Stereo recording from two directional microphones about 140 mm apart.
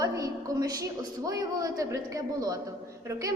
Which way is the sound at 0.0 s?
25° right (ahead or behind).